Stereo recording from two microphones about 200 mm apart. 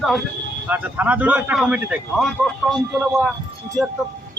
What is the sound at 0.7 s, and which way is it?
Speech, 10° right (ahead or behind).